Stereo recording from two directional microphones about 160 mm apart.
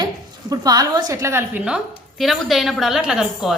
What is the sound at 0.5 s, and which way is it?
A woman's voice, 25° right (ahead or behind).